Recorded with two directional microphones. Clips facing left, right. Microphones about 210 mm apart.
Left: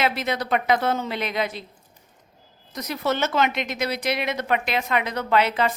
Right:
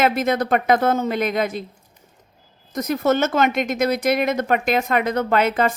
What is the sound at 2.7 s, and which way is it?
A woman's voice, 50° right (ahead or behind).